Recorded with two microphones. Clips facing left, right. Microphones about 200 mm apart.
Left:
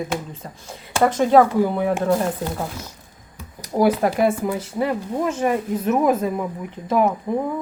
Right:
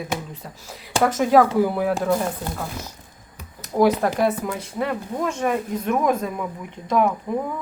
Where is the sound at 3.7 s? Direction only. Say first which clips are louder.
Left 1 dB; 5° left (ahead or behind).